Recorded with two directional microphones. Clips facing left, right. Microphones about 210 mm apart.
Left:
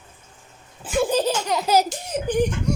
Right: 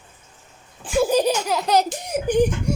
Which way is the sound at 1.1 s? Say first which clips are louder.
Right 3 dB; 15° right (ahead or behind).